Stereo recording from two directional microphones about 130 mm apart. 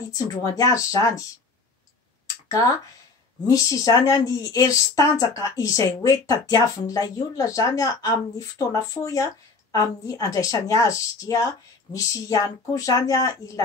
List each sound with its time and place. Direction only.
0.1 s speech: 30° left (ahead or behind)
2.4 s a sound: 25° left (ahead or behind)
3.4 s speech: 25° left (ahead or behind)